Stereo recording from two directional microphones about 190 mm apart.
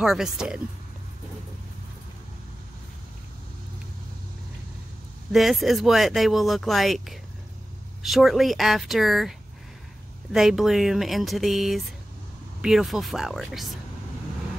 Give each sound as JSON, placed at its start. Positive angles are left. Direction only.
{"t": 0.0, "sound": "speech", "side_deg": -5}
{"t": 5.3, "sound": "speech", "side_deg": 0}
{"t": 10.3, "sound": "speech", "side_deg": 0}